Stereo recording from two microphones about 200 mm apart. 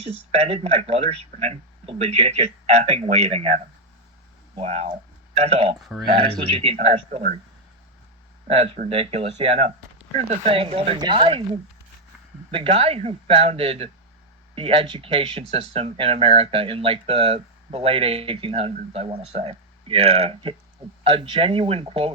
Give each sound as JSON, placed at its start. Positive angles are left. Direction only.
{"t": 0.3, "sound": "speech", "side_deg": -30}
{"t": 4.5, "sound": "speech", "side_deg": -35}
{"t": 5.8, "sound": "speech", "side_deg": 0}
{"t": 6.6, "sound": "speech", "side_deg": -30}
{"t": 8.7, "sound": "speech", "side_deg": -30}
{"t": 12.5, "sound": "speech", "side_deg": -30}